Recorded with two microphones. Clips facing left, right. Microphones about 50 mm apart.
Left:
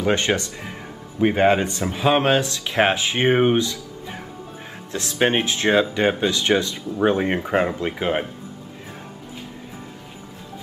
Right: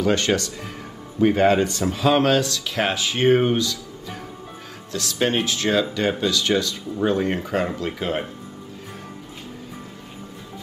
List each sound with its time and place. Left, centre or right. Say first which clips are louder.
0.0 s speech: even; left